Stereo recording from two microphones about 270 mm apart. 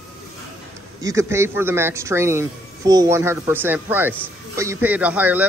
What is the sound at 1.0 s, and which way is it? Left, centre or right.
A man's voice, centre.